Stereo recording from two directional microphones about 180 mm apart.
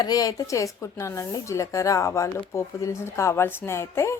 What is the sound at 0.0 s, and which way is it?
A woman's voice, 20° left (ahead or behind).